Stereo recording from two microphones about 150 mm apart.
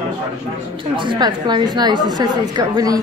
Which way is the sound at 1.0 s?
30° right (ahead or behind).